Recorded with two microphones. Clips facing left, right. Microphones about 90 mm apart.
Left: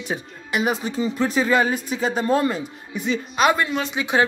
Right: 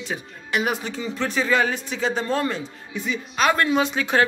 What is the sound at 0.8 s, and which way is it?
Speech, 35° left (ahead or behind).